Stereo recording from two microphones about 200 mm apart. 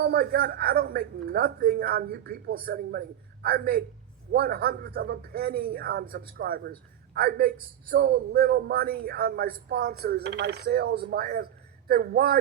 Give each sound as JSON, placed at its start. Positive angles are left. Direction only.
{"t": 0.0, "sound": "speech", "side_deg": -50}